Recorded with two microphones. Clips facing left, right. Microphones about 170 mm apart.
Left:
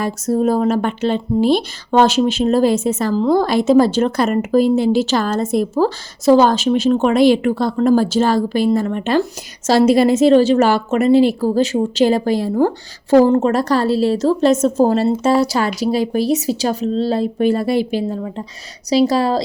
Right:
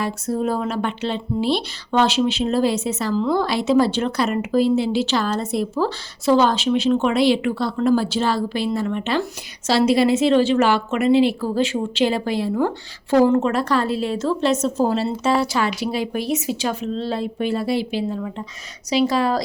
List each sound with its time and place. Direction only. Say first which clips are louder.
0.0 s a woman's voice: left 6 dB; 40° left (ahead or behind)